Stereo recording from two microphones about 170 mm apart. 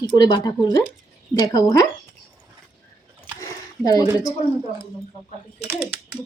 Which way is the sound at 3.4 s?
20° left (ahead or behind).